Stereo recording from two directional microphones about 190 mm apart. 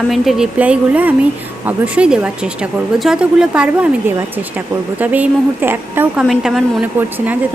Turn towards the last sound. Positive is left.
turn(degrees=0)  # may be behind; listen again after turning